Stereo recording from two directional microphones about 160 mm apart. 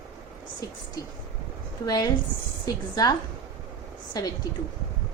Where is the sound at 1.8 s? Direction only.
25° left (ahead or behind).